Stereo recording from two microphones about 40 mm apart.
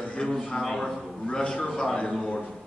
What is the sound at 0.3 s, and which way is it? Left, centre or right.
Speech, centre.